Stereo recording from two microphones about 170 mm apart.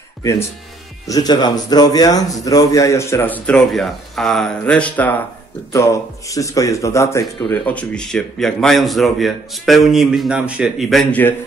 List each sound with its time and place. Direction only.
0.2 s speech: 20° left (ahead or behind)
5.7 s speech: 20° left (ahead or behind)
7.6 s speech: 5° left (ahead or behind)